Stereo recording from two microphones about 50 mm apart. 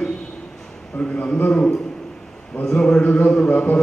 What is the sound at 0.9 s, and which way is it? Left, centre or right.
Speech, left.